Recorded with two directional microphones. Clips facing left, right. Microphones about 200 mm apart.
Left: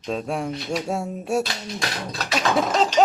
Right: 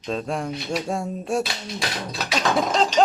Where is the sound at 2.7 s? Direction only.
5° left (ahead or behind).